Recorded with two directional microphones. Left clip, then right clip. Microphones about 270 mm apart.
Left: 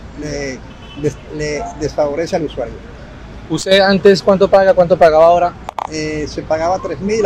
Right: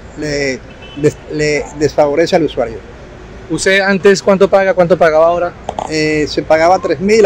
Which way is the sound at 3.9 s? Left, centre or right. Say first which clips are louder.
Right 1 dB; right.